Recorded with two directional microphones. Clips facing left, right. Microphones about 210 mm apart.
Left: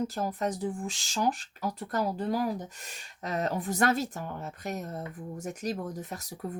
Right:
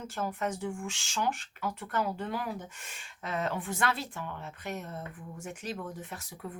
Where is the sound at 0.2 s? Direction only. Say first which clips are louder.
Left 3 dB; 35° left (ahead or behind).